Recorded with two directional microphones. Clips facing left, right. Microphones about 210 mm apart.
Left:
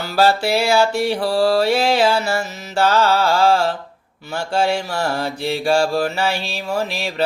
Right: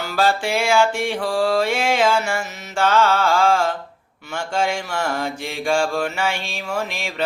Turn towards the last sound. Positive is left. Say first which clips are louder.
# left 3 dB
turn(degrees=35)  # may be behind; listen again after turning